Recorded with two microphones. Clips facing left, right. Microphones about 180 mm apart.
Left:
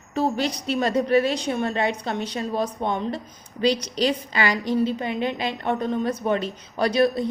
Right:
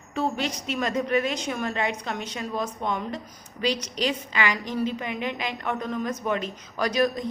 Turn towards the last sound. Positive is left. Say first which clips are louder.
# left 4 dB
turn(degrees=30)  # may be behind; listen again after turning